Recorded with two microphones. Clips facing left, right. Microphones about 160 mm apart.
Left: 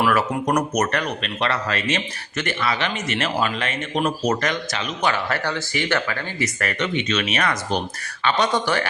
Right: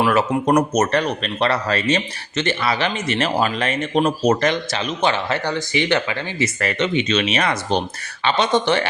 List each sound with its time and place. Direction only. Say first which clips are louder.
0.0 s speech: right 3 dB; 25° right (ahead or behind)